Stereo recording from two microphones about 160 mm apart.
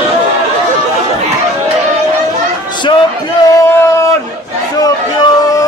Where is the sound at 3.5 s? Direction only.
15° left (ahead or behind).